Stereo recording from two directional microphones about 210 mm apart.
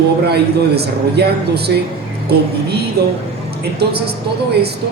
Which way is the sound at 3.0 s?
50° right (ahead or behind).